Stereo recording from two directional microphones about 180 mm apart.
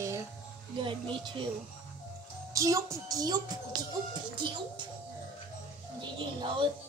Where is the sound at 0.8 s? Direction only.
25° right (ahead or behind).